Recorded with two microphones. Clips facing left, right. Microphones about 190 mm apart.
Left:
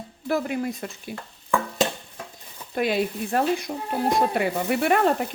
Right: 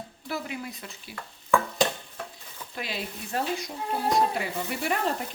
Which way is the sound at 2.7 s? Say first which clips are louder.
Left 12 dB; 55° left (ahead or behind).